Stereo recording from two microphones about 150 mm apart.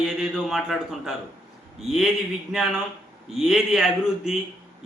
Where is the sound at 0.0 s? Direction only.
Centre (ahead or behind).